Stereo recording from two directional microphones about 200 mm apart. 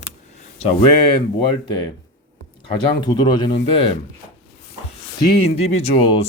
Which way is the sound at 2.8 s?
20° left (ahead or behind).